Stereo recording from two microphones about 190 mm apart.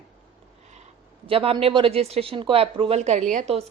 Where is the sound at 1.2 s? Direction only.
30° right (ahead or behind).